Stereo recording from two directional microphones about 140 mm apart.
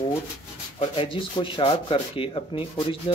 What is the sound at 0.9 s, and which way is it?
Speech, 40° left (ahead or behind).